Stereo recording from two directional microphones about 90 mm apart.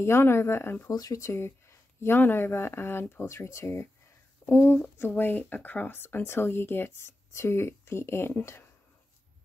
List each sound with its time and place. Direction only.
0.0 s speech: 25° left (ahead or behind)
0.8 s speech: 40° left (ahead or behind); by 8.6 s 25° left (ahead or behind)